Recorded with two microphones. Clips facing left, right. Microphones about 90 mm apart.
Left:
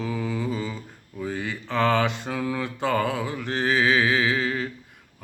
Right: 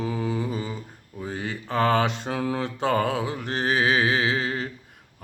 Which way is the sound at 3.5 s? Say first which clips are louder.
Left 1 dB; 60° right (ahead or behind).